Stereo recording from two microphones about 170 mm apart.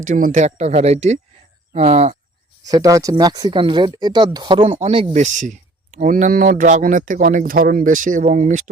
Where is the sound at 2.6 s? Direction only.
20° right (ahead or behind).